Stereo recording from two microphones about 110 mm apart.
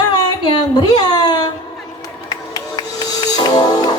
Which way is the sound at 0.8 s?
35° left (ahead or behind).